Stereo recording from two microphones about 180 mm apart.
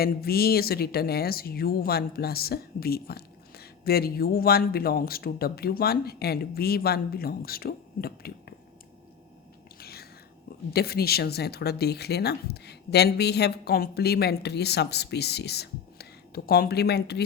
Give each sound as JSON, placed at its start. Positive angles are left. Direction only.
{"t": 0.0, "sound": "a woman's voice", "side_deg": 60}
{"t": 9.7, "sound": "whispering", "side_deg": 60}
{"t": 10.7, "sound": "a woman's voice", "side_deg": 60}